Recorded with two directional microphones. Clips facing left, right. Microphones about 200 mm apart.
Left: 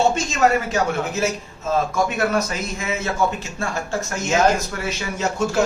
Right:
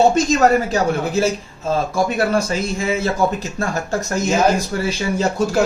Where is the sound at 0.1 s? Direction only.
40° right (ahead or behind).